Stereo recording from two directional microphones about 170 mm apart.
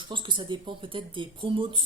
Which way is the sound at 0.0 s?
30° right (ahead or behind).